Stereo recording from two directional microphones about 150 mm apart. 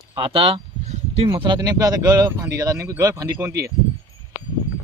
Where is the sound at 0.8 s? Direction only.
50° right (ahead or behind).